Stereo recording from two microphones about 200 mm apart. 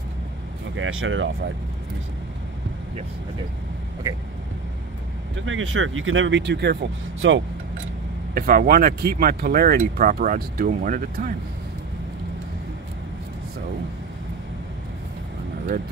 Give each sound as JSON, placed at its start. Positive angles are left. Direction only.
{"t": 0.7, "sound": "speech", "side_deg": -80}
{"t": 5.3, "sound": "speech", "side_deg": -75}
{"t": 8.4, "sound": "speech", "side_deg": -45}